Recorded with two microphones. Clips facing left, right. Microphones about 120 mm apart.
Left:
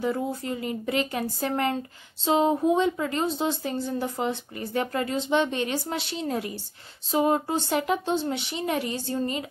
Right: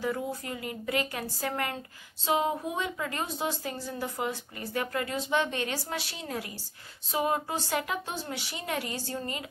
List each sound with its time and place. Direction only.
0.0 s speech: 30° left (ahead or behind)